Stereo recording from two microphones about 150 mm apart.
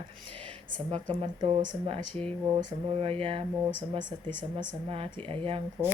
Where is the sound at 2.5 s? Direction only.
35° right (ahead or behind).